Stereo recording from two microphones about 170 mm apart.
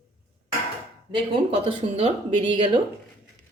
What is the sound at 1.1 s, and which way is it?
Speech, 30° right (ahead or behind).